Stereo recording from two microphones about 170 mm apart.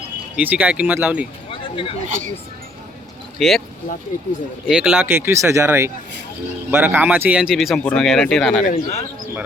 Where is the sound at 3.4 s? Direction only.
Centre (ahead or behind).